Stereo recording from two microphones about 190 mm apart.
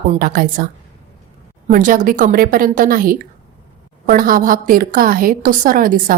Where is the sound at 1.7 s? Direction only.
45° right (ahead or behind).